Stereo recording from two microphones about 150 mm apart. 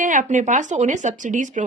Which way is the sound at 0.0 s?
60° right (ahead or behind).